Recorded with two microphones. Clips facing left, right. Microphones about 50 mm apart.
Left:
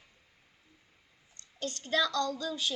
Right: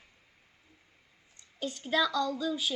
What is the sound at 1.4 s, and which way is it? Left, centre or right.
A woman's voice, centre.